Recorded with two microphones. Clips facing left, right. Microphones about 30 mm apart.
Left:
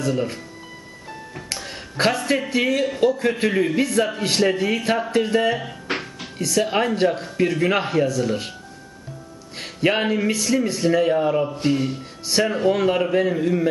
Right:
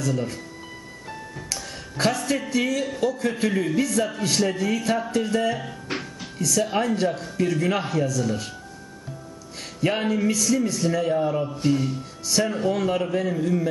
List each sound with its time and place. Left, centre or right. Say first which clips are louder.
0.0 s speech: left 3 dB; left
1.5 s speech: left 3 dB; left
9.8 s speech: left 3 dB; left